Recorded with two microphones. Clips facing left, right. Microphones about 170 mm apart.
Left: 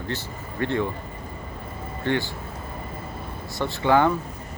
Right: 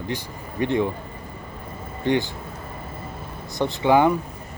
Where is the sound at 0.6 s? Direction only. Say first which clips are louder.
Right 3 dB; 15° right (ahead or behind).